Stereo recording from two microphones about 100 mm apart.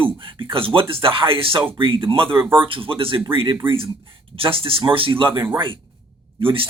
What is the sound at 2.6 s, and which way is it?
Speech, 60° right (ahead or behind).